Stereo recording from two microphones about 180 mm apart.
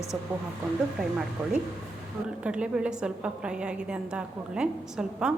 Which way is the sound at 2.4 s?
5° right (ahead or behind).